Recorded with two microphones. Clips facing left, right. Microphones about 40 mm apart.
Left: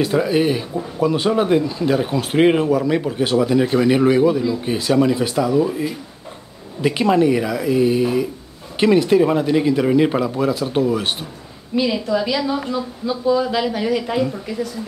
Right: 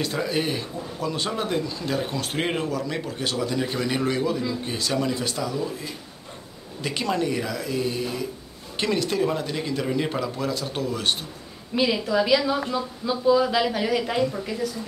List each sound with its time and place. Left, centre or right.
0.0 s speech: centre
11.7 s a woman's voice: centre